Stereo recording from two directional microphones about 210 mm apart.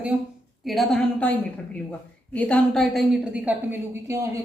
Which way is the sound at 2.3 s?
5° left (ahead or behind).